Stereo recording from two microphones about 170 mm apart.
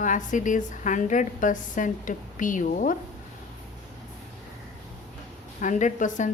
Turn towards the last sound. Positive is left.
turn(degrees=45)  # may be behind; listen again after turning